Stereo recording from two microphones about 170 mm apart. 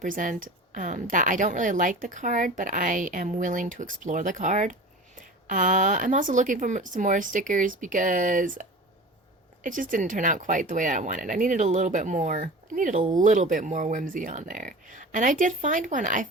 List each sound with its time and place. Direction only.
0.0 s a woman's voice: 50° right (ahead or behind)
9.6 s a woman's voice: 50° right (ahead or behind)